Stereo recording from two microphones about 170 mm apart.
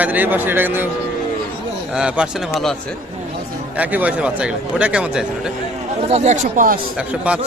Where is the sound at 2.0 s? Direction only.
5° right (ahead or behind).